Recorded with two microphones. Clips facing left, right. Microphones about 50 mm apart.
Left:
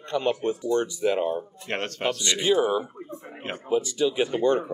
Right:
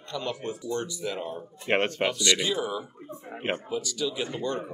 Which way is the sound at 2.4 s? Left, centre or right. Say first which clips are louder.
Left 7 dB; left.